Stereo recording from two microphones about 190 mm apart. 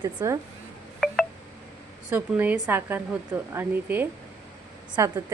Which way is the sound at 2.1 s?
10° right (ahead or behind).